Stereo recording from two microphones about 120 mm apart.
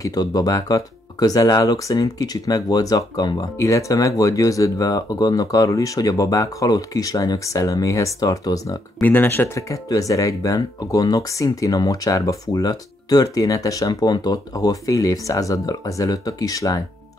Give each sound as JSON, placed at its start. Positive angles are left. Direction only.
{"t": 0.0, "sound": "speech", "side_deg": 30}
{"t": 9.0, "sound": "speech", "side_deg": 15}